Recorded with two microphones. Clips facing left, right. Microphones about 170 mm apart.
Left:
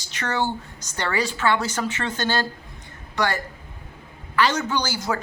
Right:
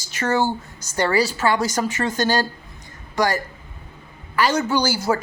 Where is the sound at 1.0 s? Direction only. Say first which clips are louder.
Right 3 dB; 35° right (ahead or behind).